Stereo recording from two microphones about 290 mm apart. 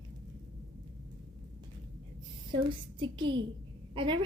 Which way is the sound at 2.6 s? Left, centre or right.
Centre.